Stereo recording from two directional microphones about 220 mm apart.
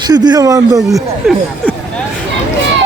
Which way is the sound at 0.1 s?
15° right (ahead or behind).